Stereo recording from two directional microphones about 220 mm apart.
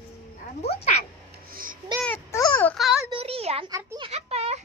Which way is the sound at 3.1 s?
25° right (ahead or behind).